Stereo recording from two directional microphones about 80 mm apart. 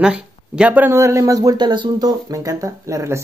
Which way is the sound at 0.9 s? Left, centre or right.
Right.